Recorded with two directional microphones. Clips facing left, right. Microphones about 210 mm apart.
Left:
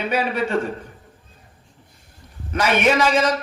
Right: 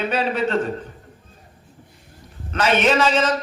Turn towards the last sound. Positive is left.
turn(degrees=10)  # may be behind; listen again after turning